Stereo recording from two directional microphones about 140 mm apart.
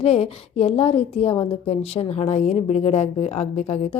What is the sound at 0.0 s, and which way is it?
A woman's voice, 45° left (ahead or behind).